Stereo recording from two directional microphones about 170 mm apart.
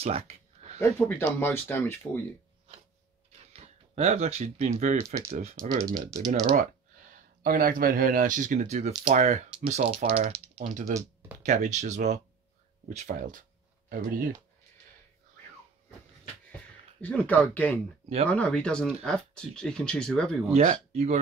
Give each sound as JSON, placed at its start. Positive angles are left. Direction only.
{"t": 0.0, "sound": "a sound", "side_deg": -35}
{"t": 0.7, "sound": "speech", "side_deg": 15}
{"t": 3.5, "sound": "speech", "side_deg": -40}
{"t": 5.9, "sound": "speech", "side_deg": -20}
{"t": 7.4, "sound": "speech", "side_deg": -55}
{"t": 10.9, "sound": "speech", "side_deg": -20}
{"t": 11.4, "sound": "speech", "side_deg": -45}
{"t": 17.0, "sound": "speech", "side_deg": 10}
{"t": 20.5, "sound": "speech", "side_deg": -40}